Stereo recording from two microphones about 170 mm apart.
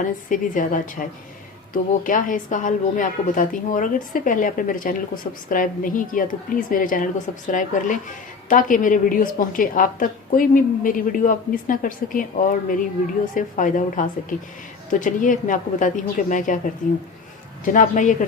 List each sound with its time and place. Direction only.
0.0 s a woman's voice: 50° left (ahead or behind)
17.7 s a woman's voice: 50° left (ahead or behind)